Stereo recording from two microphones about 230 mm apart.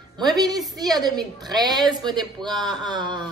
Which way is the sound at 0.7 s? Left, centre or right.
Centre.